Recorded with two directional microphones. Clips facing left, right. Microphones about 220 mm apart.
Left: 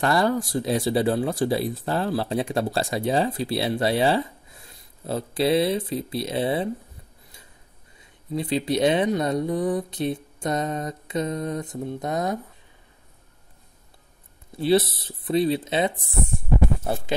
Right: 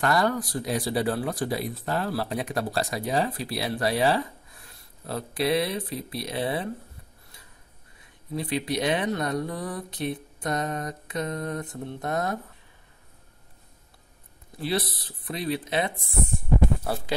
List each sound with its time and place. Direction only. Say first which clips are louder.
0.0 s speech: left 3 dB; 25° left (ahead or behind)
8.4 s speech: left 5 dB; 25° left (ahead or behind)
14.6 s speech: left 8 dB; 30° left (ahead or behind)